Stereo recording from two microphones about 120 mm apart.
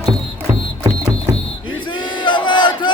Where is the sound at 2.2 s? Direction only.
40° left (ahead or behind).